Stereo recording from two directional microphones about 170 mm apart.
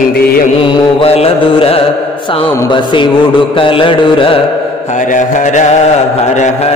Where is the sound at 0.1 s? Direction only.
65° left (ahead or behind).